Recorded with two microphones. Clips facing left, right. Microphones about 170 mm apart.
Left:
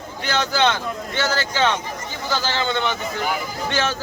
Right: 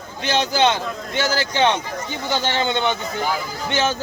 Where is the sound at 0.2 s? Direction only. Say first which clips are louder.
Right 2 dB; 20° right (ahead or behind).